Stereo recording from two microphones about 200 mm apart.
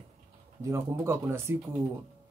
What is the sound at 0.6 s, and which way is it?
Speech, 15° right (ahead or behind).